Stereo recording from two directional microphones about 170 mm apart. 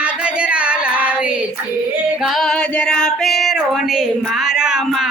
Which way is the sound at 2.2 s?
Centre (ahead or behind).